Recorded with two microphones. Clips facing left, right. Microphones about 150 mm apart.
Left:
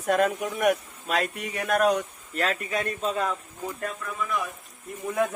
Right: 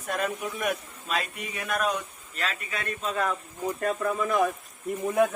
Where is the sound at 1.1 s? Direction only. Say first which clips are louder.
Left 4 dB; 65° left (ahead or behind).